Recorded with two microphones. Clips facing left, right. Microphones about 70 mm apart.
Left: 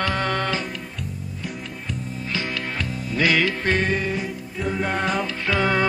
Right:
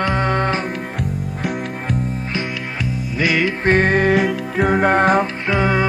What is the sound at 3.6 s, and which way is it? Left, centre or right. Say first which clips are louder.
Music: right 7 dB; right.